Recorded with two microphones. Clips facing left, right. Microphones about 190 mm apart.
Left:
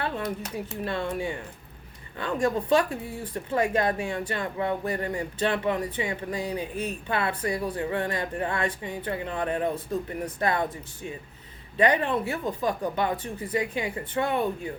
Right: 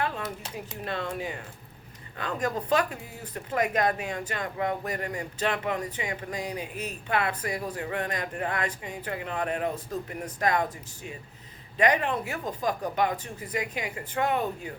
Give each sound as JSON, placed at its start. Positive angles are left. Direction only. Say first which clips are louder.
{"t": 0.9, "sound": "speech", "louder": "left 2 dB", "side_deg": 30}